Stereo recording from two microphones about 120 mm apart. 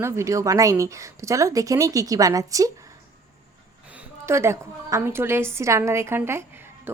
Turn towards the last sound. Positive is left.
turn(degrees=-20)  # may be behind; listen again after turning